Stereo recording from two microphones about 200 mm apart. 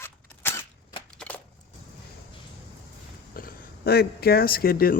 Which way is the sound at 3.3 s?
45° left (ahead or behind).